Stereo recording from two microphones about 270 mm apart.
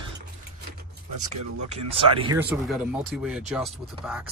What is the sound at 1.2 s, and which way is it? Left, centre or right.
Speech, right.